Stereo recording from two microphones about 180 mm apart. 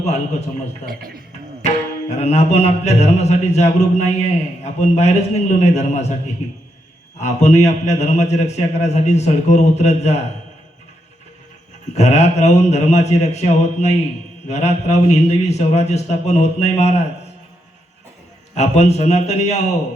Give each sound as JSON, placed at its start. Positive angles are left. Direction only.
{"t": 0.9, "sound": "a man's voice", "side_deg": -55}
{"t": 1.6, "sound": "tabla", "side_deg": 40}
{"t": 7.2, "sound": "tabla", "side_deg": 40}
{"t": 11.9, "sound": "tabla", "side_deg": 40}
{"t": 18.5, "sound": "tabla", "side_deg": 40}